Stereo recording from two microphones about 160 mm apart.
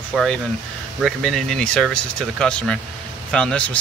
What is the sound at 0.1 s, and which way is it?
Speech, centre (ahead or behind).